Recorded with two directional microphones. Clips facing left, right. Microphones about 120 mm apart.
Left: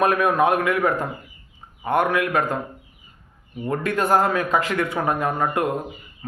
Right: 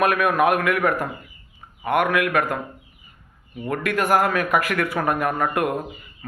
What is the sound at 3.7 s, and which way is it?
Speech, 25° left (ahead or behind).